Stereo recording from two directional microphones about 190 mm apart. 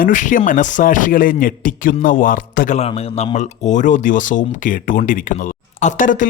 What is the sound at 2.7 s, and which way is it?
Speech, 30° left (ahead or behind).